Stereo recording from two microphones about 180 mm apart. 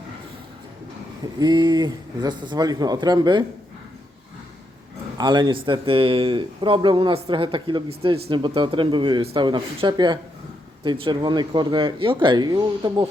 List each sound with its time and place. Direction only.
1.4 s speech: 25° right (ahead or behind)
5.1 s speech: 25° right (ahead or behind)